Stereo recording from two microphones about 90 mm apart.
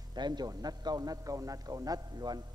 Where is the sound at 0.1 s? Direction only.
50° right (ahead or behind).